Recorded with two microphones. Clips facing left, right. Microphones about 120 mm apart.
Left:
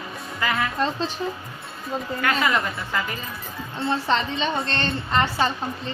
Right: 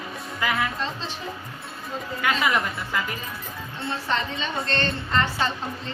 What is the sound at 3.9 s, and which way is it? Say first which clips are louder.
A woman's voice: left 4 dB; 25° left (ahead or behind).